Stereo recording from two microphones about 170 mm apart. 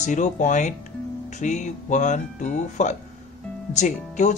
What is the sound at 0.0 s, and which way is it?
Speech, 45° left (ahead or behind).